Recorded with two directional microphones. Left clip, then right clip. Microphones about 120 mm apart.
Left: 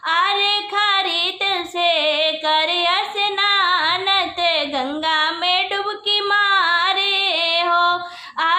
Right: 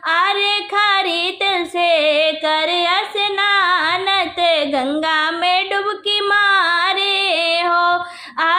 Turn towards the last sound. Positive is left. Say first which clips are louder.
# right 2 dB
turn(degrees=-25)  # may be behind; listen again after turning